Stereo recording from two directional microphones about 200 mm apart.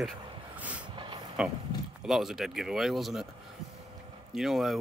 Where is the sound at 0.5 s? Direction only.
5° right (ahead or behind).